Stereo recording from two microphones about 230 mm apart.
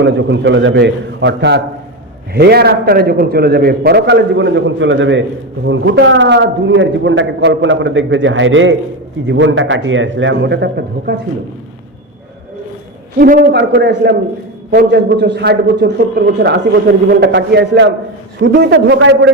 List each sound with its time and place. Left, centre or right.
0.0 s a man's voice: right
13.1 s a man's voice: right